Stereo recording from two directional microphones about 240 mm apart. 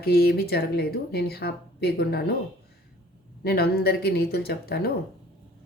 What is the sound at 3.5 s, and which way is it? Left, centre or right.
Speech, left.